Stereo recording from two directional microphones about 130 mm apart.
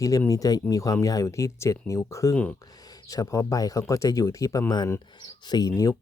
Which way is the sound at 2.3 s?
10° left (ahead or behind).